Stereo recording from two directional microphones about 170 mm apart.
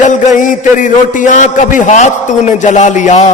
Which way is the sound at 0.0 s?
45° left (ahead or behind).